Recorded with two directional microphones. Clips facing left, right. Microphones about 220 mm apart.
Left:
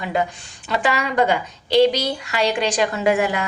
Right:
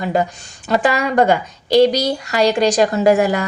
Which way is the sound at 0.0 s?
40° right (ahead or behind).